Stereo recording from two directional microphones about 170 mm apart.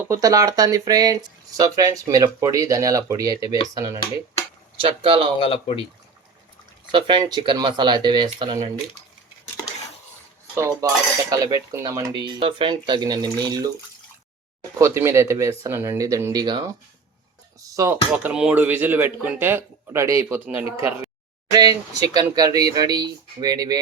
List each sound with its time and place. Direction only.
0.0 s speech: 20° right (ahead or behind)
4.8 s speech: 30° right (ahead or behind)
5.4 s speech: 30° left (ahead or behind)
6.9 s speech: 25° right (ahead or behind)
10.5 s speech: 15° right (ahead or behind)
14.8 s speech: 15° right (ahead or behind)
17.6 s music: 20° right (ahead or behind)
18.3 s speech: 5° right (ahead or behind); by 23.8 s 20° right (ahead or behind)